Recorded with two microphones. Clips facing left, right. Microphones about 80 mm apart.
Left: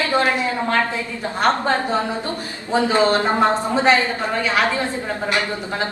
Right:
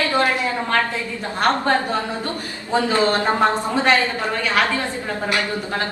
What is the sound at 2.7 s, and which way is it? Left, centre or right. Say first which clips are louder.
A woman's voice: left 2 dB; left.